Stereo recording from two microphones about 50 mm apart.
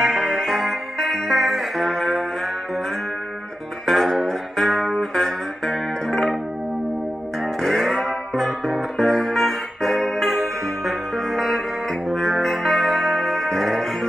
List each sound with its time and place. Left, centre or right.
0.0 s music: centre
3.8 s music: centre
7.6 s music: centre